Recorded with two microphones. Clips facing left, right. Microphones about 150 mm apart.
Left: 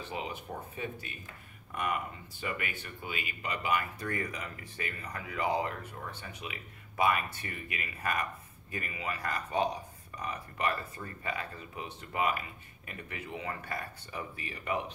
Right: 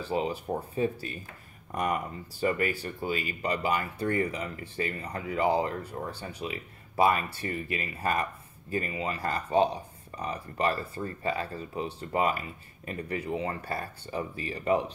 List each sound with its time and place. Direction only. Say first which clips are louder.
0.0 s speech: right 9 dB; 35° right (ahead or behind)